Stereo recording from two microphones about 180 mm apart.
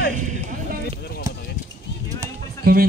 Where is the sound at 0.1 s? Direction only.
45° right (ahead or behind).